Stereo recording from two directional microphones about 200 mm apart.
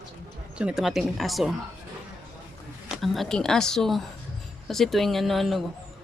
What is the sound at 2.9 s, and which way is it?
A man's voice, centre (ahead or behind).